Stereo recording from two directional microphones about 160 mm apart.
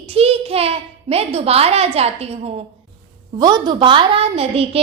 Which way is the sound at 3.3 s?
25° right (ahead or behind).